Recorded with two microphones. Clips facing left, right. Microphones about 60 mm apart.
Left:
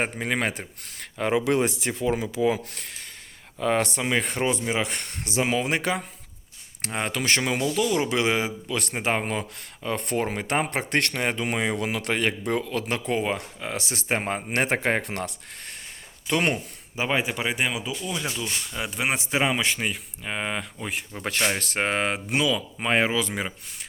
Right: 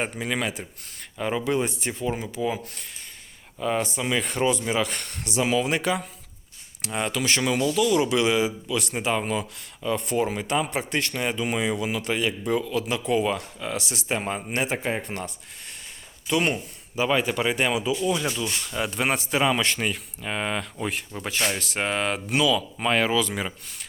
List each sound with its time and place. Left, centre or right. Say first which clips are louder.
0.0 s speech: left 1 dB; left
0.9 s speech: left 3 dB; left
4.0 s speech: right 1 dB; left
14.5 s speech: left 4 dB; left
16.2 s speech: even; left
17.0 s speech: right 3 dB; left
21.5 s speech: left 1 dB; left